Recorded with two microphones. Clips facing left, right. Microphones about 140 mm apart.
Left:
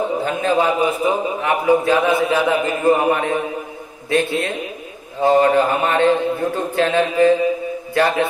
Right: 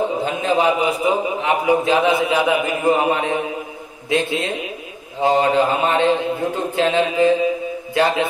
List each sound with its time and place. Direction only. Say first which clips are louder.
0.2 s a man's voice: left 1 dB; 15° right (ahead or behind)
7.9 s mantra: left 1 dB; 20° right (ahead or behind)